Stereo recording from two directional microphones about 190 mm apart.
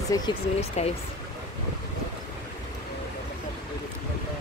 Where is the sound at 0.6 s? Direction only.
35° left (ahead or behind).